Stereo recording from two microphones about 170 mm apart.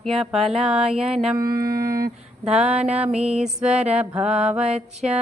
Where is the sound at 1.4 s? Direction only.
60° right (ahead or behind).